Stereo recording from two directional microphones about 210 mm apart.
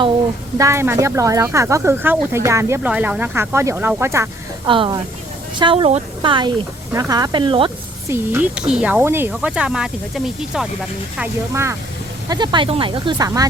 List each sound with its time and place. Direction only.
0.6 s speech: 10° right (ahead or behind)
8.0 s speech: 10° right (ahead or behind)
11.2 s speech: 15° right (ahead or behind)